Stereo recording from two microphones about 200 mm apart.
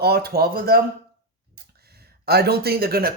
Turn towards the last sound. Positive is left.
turn(degrees=-50)  # may be behind; listen again after turning